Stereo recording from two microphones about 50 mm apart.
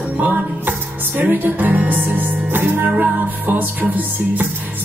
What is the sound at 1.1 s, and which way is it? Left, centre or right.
Music, right.